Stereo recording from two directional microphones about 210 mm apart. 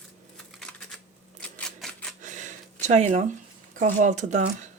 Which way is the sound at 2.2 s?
35° right (ahead or behind).